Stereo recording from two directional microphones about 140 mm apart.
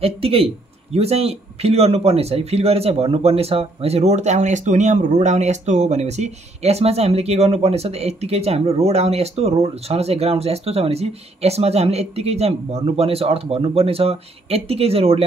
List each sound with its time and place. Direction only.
0.0 s speech: 45° right (ahead or behind)